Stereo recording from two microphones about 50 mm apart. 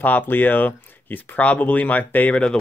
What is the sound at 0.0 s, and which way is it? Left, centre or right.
Speech, left.